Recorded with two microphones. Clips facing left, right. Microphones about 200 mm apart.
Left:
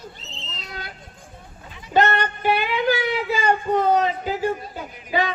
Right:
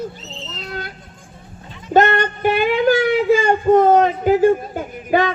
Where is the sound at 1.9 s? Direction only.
50° right (ahead or behind).